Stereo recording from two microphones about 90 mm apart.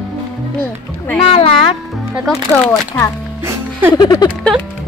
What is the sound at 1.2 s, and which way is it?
Speech, 90° left.